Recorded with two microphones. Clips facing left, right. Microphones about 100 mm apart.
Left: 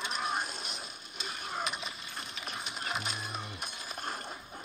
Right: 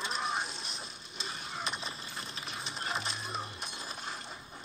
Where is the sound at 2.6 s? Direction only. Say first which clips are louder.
Right 1 dB; 5° left (ahead or behind).